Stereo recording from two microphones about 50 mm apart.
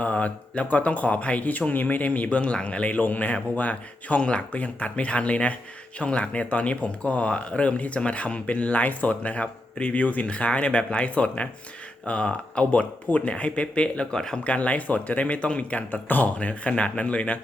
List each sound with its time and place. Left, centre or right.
0.0 s speech: left
14.1 s speech: centre
14.4 s speech: left